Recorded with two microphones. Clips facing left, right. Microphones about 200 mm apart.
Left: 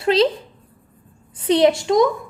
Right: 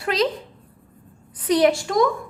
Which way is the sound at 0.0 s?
25° left (ahead or behind).